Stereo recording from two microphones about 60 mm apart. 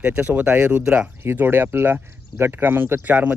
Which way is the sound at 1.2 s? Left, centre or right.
Right.